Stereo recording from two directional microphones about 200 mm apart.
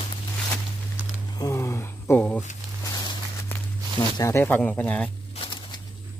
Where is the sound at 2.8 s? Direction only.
20° left (ahead or behind).